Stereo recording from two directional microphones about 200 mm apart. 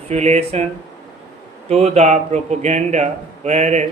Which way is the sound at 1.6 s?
35° right (ahead or behind).